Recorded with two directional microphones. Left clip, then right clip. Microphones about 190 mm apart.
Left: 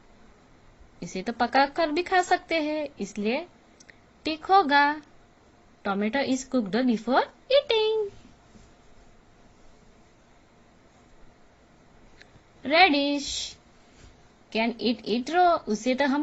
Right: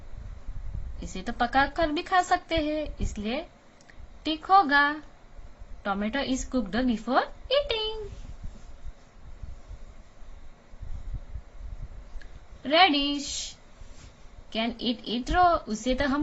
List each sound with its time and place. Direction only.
1.0 s a woman's voice: 25° left (ahead or behind)
12.6 s a woman's voice: 20° left (ahead or behind)
14.5 s a woman's voice: 25° left (ahead or behind)